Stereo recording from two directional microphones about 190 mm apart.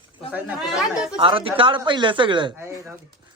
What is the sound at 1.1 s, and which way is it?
A man's voice, 30° right (ahead or behind).